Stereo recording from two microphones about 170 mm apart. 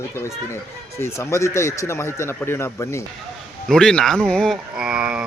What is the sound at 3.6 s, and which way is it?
Speech, 5° left (ahead or behind).